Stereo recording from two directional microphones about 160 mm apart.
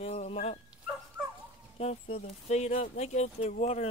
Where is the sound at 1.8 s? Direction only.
40° left (ahead or behind).